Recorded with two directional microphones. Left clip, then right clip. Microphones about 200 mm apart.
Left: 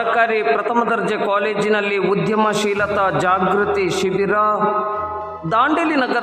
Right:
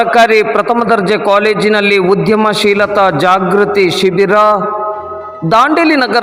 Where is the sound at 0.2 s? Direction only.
30° right (ahead or behind).